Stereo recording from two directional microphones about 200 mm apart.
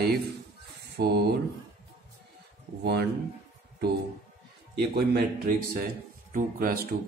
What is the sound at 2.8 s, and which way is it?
Speech, 55° right (ahead or behind).